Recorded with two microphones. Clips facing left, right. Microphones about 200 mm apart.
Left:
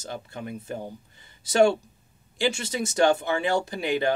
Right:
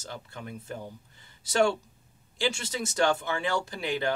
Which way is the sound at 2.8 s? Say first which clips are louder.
Left 5 dB; 20° left (ahead or behind).